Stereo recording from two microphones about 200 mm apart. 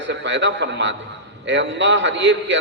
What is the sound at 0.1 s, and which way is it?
A man's voice, 65° right (ahead or behind).